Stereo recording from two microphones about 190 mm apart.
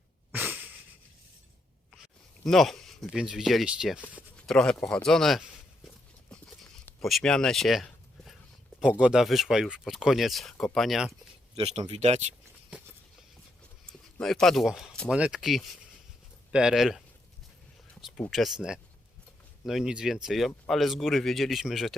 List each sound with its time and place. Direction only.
0.3 s wheeze: 10° right (ahead or behind)
2.4 s speech: centre (ahead or behind)
6.8 s a sound: centre (ahead or behind)
8.8 s speech: 5° right (ahead or behind)
11.5 s speech: 35° right (ahead or behind)
12.7 s a sound: 5° right (ahead or behind)
13.8 s speech: 5° left (ahead or behind)
18.0 s speech: centre (ahead or behind)